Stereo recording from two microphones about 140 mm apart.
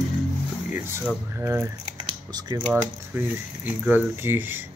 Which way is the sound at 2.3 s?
30° right (ahead or behind).